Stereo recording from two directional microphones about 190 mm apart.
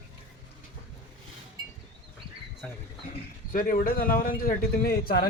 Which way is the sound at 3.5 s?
45° left (ahead or behind).